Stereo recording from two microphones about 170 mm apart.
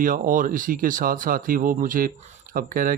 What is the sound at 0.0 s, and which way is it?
Speech, 50° right (ahead or behind).